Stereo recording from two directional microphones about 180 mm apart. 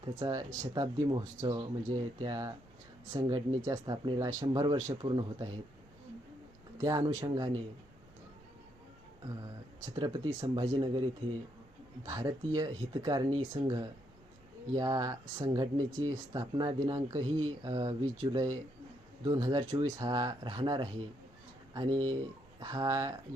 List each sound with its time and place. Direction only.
0.0 s speech: 20° right (ahead or behind)
6.7 s speech: 20° right (ahead or behind)
9.8 s speech: 20° right (ahead or behind)
12.0 s speech: 20° right (ahead or behind)